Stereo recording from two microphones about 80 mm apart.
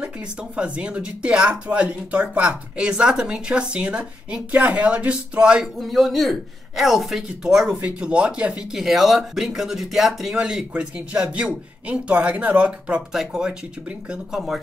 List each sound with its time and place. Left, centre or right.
0.0 s speech: centre